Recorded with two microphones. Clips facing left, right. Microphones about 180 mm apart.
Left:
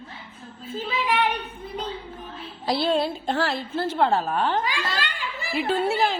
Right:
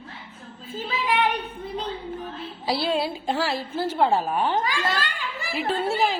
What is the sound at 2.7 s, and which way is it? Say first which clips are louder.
A woman's voice: left 2 dB; 5° right (ahead or behind).